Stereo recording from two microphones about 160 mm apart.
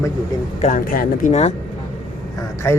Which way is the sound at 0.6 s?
60° left (ahead or behind).